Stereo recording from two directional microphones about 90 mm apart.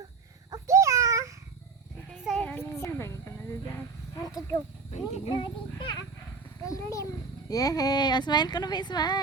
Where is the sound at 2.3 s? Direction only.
20° left (ahead or behind).